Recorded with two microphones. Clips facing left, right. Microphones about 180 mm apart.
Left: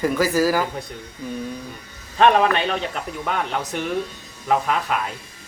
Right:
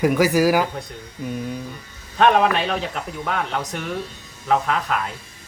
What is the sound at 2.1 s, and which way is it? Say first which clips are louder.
A man's voice: even; centre (ahead or behind).